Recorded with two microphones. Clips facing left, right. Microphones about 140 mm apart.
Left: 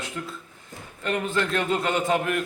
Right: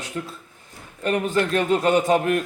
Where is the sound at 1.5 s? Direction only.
40° right (ahead or behind).